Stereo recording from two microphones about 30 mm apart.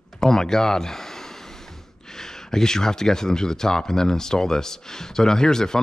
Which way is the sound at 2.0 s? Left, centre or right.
Centre.